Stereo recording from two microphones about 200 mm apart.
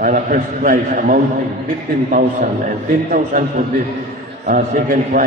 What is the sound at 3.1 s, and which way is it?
Mantra, 40° right (ahead or behind).